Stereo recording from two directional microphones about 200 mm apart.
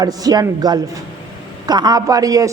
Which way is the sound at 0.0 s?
20° right (ahead or behind).